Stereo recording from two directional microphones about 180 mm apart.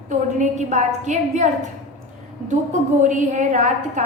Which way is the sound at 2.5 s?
40° right (ahead or behind).